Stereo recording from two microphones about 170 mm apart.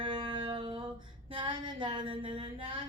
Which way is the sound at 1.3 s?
30° right (ahead or behind).